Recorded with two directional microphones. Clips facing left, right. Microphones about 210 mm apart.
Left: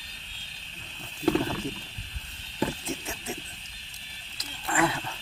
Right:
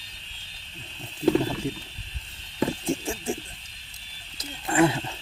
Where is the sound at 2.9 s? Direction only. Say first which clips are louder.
Right 7 dB; 30° right (ahead or behind).